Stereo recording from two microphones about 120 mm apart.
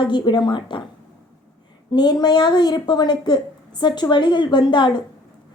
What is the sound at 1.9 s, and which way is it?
Speech, 35° left (ahead or behind).